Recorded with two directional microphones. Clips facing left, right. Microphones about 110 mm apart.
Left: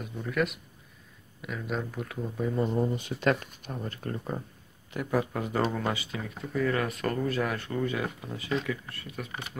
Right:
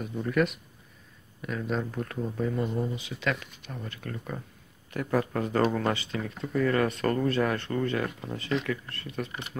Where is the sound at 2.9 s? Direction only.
50° left (ahead or behind).